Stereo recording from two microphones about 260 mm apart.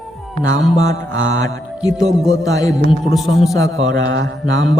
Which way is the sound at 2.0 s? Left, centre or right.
Centre.